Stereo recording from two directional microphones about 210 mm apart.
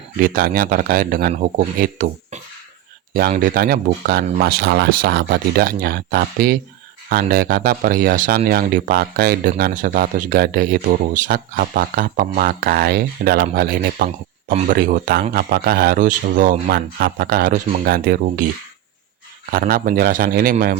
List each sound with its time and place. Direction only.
0.2 s speech: 45° right (ahead or behind)
19.5 s speech: 45° right (ahead or behind)